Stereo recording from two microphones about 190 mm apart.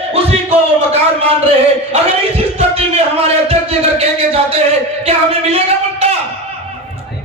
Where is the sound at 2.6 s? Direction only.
30° right (ahead or behind).